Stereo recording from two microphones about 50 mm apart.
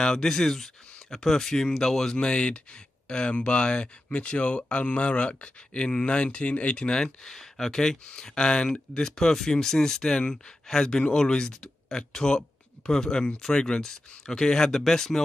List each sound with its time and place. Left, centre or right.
0.0 s speech: centre